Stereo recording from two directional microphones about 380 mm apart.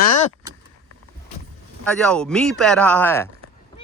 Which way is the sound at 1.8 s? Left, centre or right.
Centre.